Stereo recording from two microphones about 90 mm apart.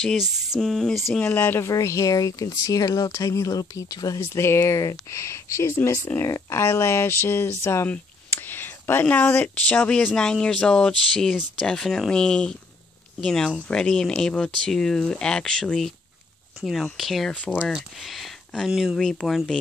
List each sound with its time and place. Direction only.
0.6 s speech: 5° left (ahead or behind)
1.2 s speech: 25° left (ahead or behind)
1.7 s speech: 35° left (ahead or behind)
4.2 s speech: 30° left (ahead or behind)
7.9 s a sound: 25° left (ahead or behind)
9.0 s speech: 20° left (ahead or behind); by 17.3 s centre (ahead or behind)
17.3 s speech: 15° left (ahead or behind)
17.7 s speech: centre (ahead or behind)